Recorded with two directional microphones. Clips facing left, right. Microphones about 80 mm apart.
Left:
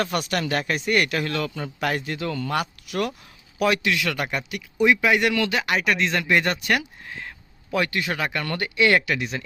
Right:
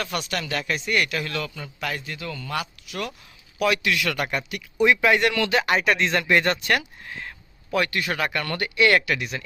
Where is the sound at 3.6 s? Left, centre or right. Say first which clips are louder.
Left 1 dB; left.